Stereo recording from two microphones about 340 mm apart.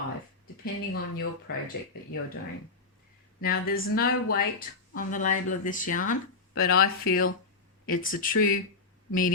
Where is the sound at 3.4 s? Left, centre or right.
Left.